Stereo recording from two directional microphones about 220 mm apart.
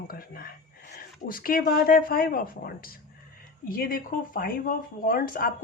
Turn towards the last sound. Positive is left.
turn(degrees=40)  # may be behind; listen again after turning